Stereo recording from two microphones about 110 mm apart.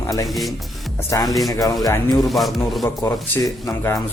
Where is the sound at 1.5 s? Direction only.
30° left (ahead or behind).